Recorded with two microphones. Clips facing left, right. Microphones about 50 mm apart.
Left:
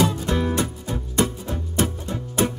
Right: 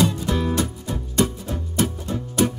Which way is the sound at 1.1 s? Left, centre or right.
Left.